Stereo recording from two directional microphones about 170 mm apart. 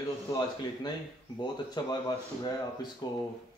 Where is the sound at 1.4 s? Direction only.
25° left (ahead or behind).